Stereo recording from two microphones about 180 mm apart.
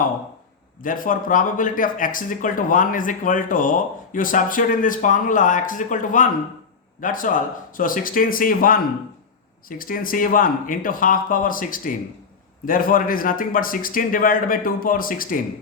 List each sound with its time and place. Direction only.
0.8 s speech: 50° left (ahead or behind)